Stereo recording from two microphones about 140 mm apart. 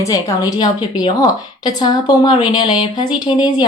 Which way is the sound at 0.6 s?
30° left (ahead or behind).